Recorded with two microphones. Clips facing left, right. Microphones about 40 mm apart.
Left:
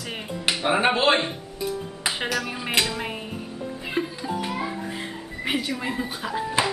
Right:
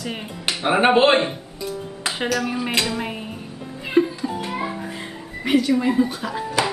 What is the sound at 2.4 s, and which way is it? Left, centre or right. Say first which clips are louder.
Speech: right 2 dB; centre.